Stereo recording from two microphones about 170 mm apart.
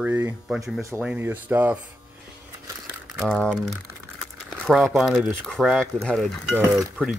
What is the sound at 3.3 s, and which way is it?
Speech, centre (ahead or behind).